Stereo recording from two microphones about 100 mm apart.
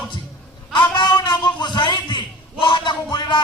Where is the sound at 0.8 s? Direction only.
50° left (ahead or behind).